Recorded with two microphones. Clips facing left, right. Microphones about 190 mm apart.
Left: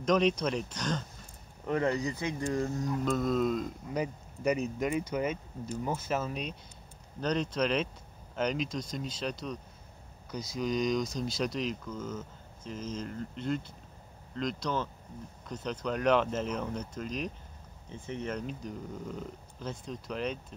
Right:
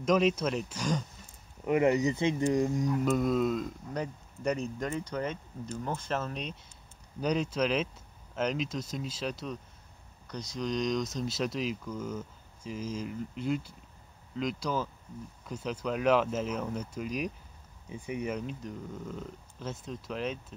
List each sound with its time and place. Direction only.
0.0 s speech: 5° right (ahead or behind)
7.2 s speech: 10° right (ahead or behind)